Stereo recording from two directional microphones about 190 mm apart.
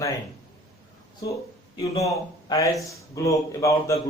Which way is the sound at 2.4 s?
15° left (ahead or behind).